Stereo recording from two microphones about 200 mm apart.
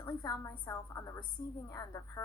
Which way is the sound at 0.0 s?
20° left (ahead or behind).